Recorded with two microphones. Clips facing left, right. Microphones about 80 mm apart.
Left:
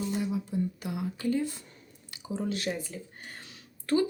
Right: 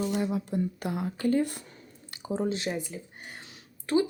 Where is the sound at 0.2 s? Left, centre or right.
Right.